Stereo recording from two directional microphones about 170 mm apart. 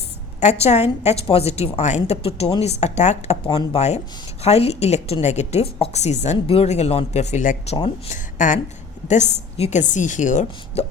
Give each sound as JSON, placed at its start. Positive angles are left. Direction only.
{"t": 0.6, "sound": "a woman's voice", "side_deg": 40}
{"t": 3.4, "sound": "a woman's voice", "side_deg": 30}